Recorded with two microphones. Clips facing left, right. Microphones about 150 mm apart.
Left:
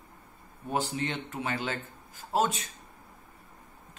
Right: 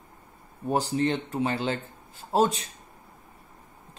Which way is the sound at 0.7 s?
35° right (ahead or behind).